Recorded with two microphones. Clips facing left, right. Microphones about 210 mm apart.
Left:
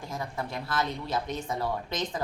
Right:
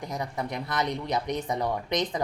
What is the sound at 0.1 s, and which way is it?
A woman's voice, 20° right (ahead or behind).